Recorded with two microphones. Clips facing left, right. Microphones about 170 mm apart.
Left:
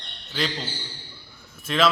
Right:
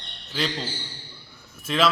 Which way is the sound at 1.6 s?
10° right (ahead or behind).